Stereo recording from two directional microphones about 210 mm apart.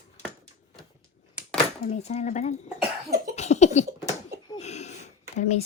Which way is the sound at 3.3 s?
30° left (ahead or behind).